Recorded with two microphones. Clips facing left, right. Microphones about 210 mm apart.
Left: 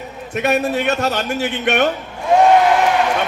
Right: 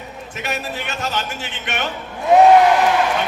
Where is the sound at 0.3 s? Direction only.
60° left (ahead or behind).